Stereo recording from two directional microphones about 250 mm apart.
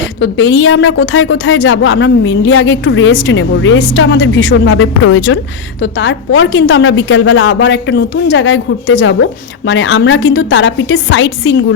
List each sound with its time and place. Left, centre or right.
0.2 s a woman's voice: left